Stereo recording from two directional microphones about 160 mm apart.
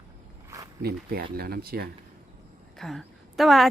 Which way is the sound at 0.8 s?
70° right (ahead or behind).